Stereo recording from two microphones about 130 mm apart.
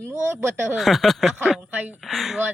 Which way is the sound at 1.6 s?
10° right (ahead or behind).